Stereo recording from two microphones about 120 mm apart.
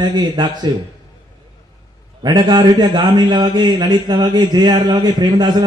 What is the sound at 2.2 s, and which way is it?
A man's voice, 35° right (ahead or behind).